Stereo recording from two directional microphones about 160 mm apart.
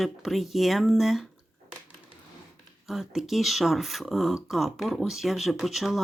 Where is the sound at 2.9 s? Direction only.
Centre (ahead or behind).